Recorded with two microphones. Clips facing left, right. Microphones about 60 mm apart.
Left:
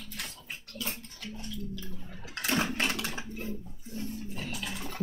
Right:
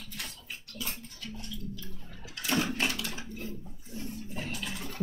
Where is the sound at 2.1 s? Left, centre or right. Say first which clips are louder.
Even; left.